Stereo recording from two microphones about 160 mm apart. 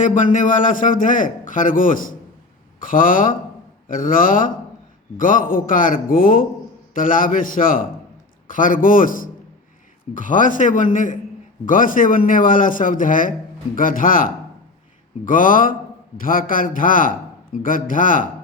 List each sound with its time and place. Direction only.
0.0 s a man's voice: 55° left (ahead or behind)